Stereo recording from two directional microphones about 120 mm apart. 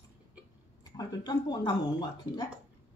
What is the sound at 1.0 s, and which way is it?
Speech, 35° left (ahead or behind).